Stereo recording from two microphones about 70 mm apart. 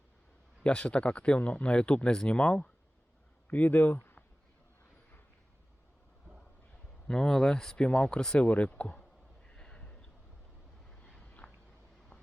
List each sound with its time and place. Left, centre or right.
0.6 s speech: centre
7.1 s speech: centre
9.5 s a sound: centre